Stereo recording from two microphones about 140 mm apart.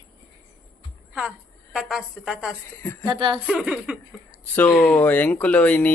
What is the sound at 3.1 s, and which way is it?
Speech, 35° right (ahead or behind).